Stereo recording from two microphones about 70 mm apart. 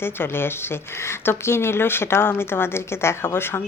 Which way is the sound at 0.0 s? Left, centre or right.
Left.